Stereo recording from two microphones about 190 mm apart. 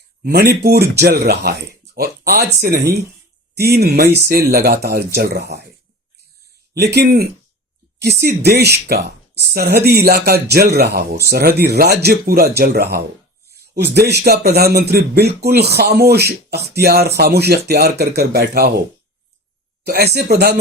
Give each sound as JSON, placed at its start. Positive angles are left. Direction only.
{"t": 0.2, "sound": "a man's voice", "side_deg": -55}
{"t": 6.7, "sound": "a man's voice", "side_deg": -60}
{"t": 19.8, "sound": "a man's voice", "side_deg": -55}